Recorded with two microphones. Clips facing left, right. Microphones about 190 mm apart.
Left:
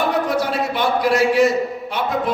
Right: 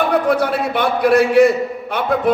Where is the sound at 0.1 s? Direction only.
60° right (ahead or behind).